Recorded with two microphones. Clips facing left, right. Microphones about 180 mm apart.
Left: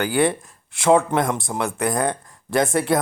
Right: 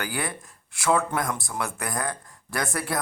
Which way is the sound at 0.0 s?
25° left (ahead or behind).